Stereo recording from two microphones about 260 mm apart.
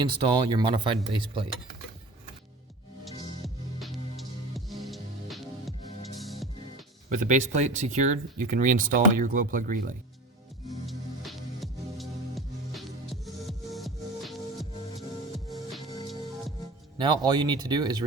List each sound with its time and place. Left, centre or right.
0.0 s speech: centre
3.0 s music: centre
7.2 s speech: right
10.8 s music: centre
17.0 s speech: centre